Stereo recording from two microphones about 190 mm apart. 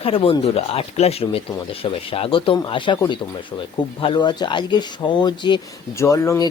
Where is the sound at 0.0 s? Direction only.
30° left (ahead or behind).